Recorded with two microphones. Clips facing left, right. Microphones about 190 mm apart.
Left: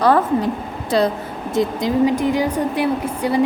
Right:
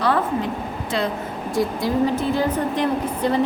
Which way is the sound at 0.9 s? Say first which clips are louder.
Left 7 dB; 35° left (ahead or behind).